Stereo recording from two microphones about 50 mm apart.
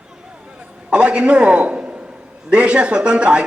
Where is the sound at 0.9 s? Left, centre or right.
Centre.